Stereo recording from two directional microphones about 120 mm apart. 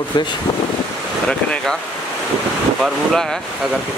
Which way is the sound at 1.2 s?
5° left (ahead or behind).